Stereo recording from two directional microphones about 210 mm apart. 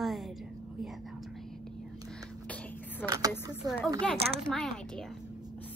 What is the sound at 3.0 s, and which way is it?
Speech, 15° right (ahead or behind).